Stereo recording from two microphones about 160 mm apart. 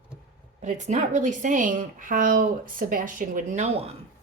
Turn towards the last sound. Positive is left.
turn(degrees=-45)  # may be behind; listen again after turning